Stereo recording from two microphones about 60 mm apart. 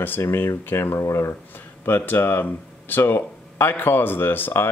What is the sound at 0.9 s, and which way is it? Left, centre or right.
Speech, left.